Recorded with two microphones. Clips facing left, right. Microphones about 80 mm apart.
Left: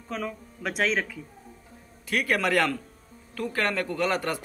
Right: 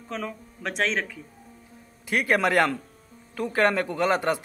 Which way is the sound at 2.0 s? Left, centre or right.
Right.